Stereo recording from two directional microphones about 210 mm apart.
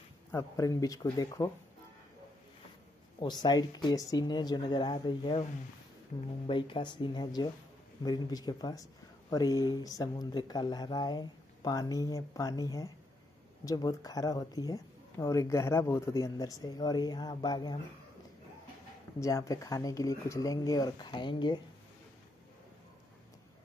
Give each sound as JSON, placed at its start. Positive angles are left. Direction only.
{"t": 0.3, "sound": "speech", "side_deg": 15}
{"t": 3.2, "sound": "speech", "side_deg": 20}
{"t": 19.1, "sound": "speech", "side_deg": 15}